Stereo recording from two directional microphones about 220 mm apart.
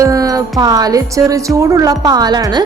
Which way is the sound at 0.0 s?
15° right (ahead or behind).